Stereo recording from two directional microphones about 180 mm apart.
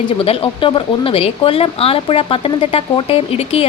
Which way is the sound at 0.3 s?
30° left (ahead or behind).